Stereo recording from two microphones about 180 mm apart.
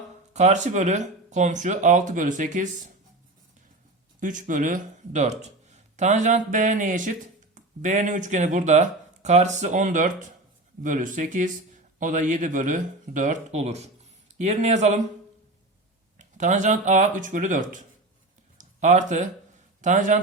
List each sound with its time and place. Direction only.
0.3 s speech: 40° right (ahead or behind)
4.2 s speech: 45° right (ahead or behind)
16.1 s speech: 45° right (ahead or behind)
18.5 s a sound: 45° right (ahead or behind)
19.8 s speech: 45° right (ahead or behind)